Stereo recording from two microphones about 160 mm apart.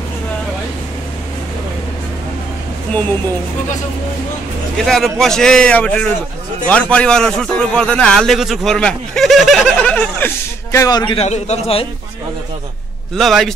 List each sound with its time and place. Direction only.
4.7 s a man's voice: centre (ahead or behind); by 11.1 s 25° left (ahead or behind)
11.1 s a man's voice: 45° left (ahead or behind)
13.1 s a man's voice: centre (ahead or behind)